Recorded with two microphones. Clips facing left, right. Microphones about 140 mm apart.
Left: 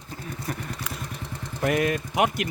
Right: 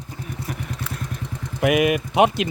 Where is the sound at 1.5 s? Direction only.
10° right (ahead or behind).